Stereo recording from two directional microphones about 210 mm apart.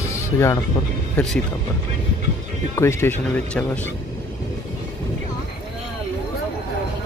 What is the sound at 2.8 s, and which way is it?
Speech, 10° left (ahead or behind).